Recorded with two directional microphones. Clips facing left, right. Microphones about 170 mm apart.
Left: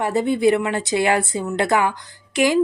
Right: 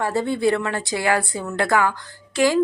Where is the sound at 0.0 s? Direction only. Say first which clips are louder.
Left 3 dB; 20° left (ahead or behind).